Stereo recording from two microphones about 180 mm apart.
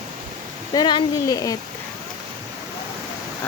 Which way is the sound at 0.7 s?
25° left (ahead or behind).